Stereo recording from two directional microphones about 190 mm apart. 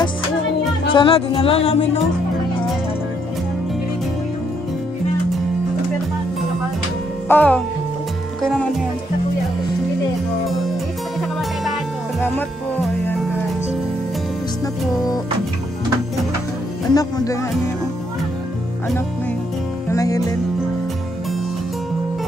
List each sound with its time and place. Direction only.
0.9 s music: 25° left (ahead or behind)
7.2 s speech: 10° left (ahead or behind)
12.2 s music: 10° left (ahead or behind)
16.9 s music: 20° left (ahead or behind)
19.9 s music: 15° left (ahead or behind)